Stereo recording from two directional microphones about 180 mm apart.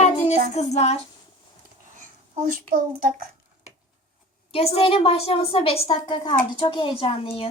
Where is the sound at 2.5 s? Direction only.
50° right (ahead or behind).